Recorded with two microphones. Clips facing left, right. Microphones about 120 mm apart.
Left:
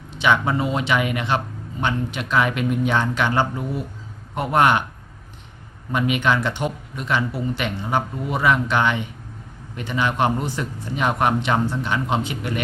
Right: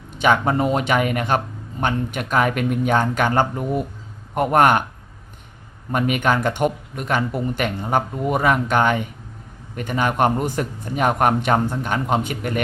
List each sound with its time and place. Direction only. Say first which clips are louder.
0.1 s speech: right 2 dB; 45° right (ahead or behind)
5.9 s speech: right 1 dB; 50° right (ahead or behind)